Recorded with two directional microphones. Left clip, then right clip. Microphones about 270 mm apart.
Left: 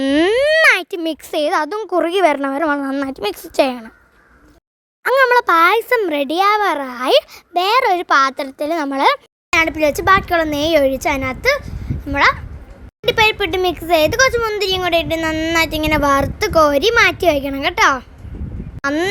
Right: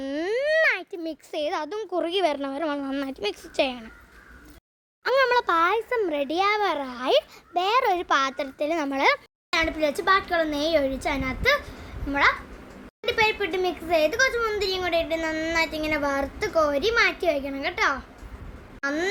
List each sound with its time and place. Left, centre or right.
0.0 s speech: left
5.0 s a child's voice: left